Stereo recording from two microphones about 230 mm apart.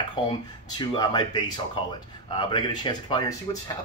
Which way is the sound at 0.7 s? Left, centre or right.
Centre.